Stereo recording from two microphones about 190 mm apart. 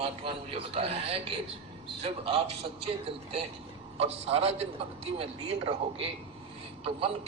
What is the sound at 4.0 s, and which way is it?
A man's voice, 30° right (ahead or behind).